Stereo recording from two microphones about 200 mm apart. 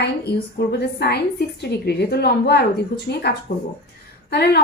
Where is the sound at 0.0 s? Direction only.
55° left (ahead or behind).